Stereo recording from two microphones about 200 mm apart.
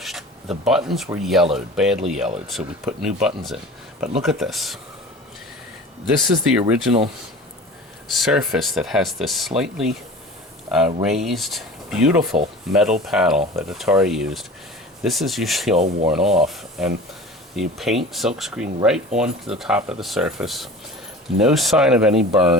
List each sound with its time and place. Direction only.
0.0 s a sound: centre (ahead or behind)
1.2 s speech: centre (ahead or behind)
6.6 s speech: 5° right (ahead or behind)
8.1 s speech: centre (ahead or behind)
15.7 s speech: 35° right (ahead or behind)
16.0 s speech: 5° right (ahead or behind)